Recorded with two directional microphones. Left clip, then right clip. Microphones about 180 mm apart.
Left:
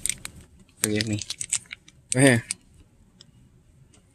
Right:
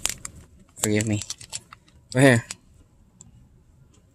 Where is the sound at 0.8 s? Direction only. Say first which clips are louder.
Right 2 dB; 15° right (ahead or behind).